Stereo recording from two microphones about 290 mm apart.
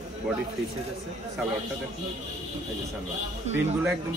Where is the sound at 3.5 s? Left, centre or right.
Right.